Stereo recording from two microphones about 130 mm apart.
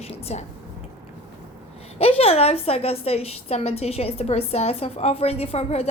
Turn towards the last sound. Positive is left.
turn(degrees=55)  # may be behind; listen again after turning